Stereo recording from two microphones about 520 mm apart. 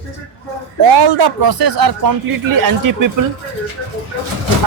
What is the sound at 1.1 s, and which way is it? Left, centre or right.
Speech, right.